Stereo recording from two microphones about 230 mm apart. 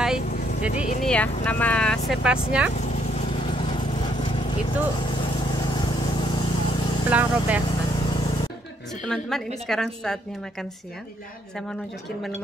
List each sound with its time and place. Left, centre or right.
0.3 s vehicle: left
1.0 s speech: centre
2.8 s vehicle: left
3.4 s vehicle: left
7.1 s speech: centre
7.6 s vehicle: left
9.0 s speech: centre